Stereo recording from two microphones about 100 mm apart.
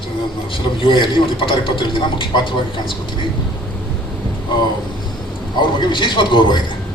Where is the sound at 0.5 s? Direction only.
55° left (ahead or behind).